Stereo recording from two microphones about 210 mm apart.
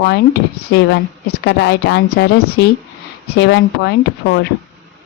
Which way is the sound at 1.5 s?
55° left (ahead or behind).